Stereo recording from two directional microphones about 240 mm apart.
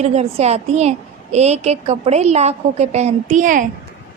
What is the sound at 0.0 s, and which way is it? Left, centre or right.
A woman's voice, right.